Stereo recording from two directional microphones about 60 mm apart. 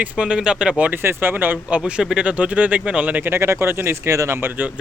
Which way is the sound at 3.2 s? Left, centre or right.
Right.